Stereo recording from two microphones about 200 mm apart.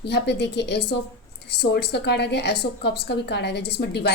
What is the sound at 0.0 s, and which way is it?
A woman's voice, 55° left (ahead or behind).